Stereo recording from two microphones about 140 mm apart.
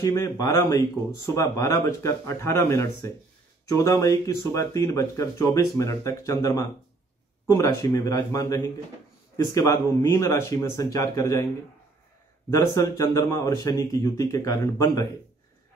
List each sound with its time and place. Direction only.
0.0 s speech: 20° left (ahead or behind)
12.4 s speech: 25° left (ahead or behind)